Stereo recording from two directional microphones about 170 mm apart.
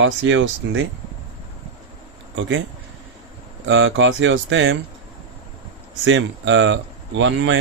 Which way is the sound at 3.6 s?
90° right.